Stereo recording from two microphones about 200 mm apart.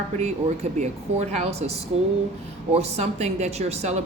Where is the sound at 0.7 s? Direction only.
35° right (ahead or behind).